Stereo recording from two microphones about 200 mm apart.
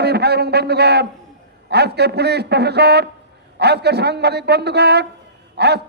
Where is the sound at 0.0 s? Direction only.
55° right (ahead or behind).